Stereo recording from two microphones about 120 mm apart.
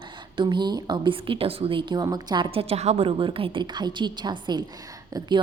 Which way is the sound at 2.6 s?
60° right (ahead or behind).